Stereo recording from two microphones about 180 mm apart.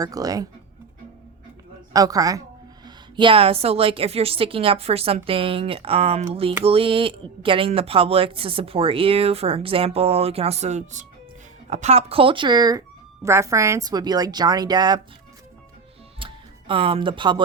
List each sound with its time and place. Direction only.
0.0 s a woman's voice: 20° right (ahead or behind)
1.9 s a woman's voice: 20° right (ahead or behind)
16.1 s music: 30° right (ahead or behind)